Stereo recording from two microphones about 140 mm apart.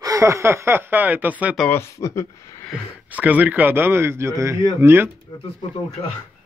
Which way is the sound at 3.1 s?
10° right (ahead or behind).